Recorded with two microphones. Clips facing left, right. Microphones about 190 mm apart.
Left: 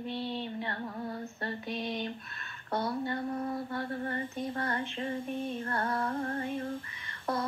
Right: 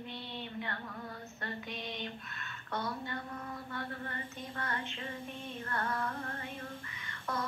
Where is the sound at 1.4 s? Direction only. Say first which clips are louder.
Left 4 dB; 35° left (ahead or behind).